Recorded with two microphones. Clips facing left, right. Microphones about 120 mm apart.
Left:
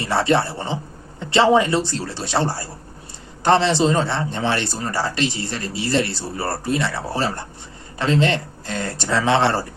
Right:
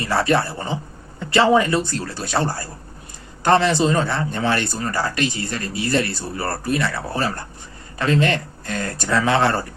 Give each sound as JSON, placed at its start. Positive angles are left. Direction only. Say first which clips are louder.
{"t": 0.0, "sound": "a man's voice", "louder": "even", "side_deg": 25}